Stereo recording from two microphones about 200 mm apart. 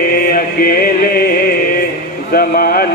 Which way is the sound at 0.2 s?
45° left (ahead or behind).